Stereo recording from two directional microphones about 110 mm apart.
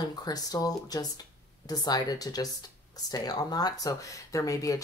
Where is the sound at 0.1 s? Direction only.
35° left (ahead or behind).